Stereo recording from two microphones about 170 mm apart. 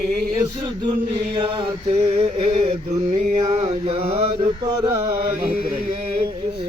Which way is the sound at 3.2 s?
40° right (ahead or behind).